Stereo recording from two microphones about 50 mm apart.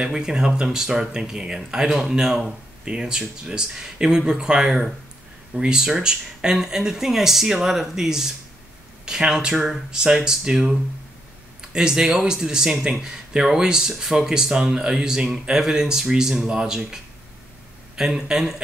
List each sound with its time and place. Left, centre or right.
0.0 s speech: centre